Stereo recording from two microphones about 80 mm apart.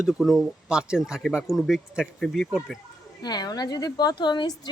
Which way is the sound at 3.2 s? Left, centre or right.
Left.